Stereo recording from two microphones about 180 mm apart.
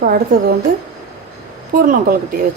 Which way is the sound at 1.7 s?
50° right (ahead or behind).